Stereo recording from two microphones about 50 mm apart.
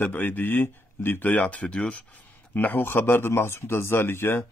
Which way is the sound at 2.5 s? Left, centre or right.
Left.